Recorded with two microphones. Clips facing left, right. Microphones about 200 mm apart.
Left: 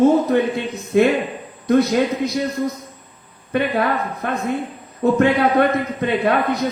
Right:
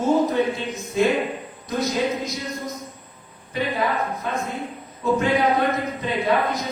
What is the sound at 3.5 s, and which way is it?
A man's voice, 65° left (ahead or behind).